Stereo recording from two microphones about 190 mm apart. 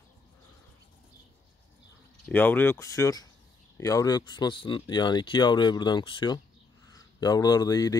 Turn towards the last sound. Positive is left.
turn(degrees=20)  # may be behind; listen again after turning